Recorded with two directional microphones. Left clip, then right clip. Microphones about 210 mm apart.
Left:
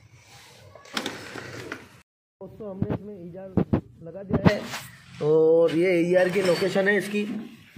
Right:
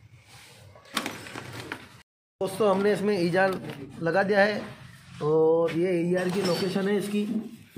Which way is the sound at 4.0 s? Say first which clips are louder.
Right 15 dB; 10° right (ahead or behind).